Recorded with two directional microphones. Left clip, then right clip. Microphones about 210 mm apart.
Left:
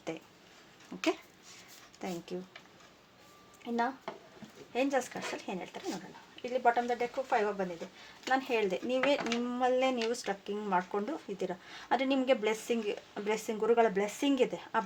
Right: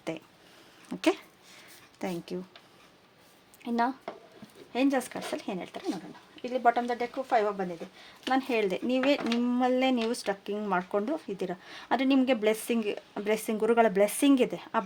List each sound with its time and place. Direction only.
0.9 s speech: 55° right (ahead or behind)
3.6 s speech: 55° right (ahead or behind)